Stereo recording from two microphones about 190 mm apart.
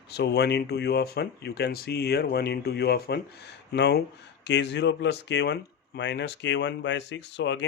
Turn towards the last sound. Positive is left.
turn(degrees=70)  # may be behind; listen again after turning